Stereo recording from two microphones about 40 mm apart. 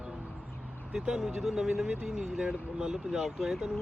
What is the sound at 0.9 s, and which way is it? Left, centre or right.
Speech, centre.